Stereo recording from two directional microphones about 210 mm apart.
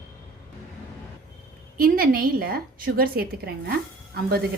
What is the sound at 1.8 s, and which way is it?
Speech, 45° right (ahead or behind).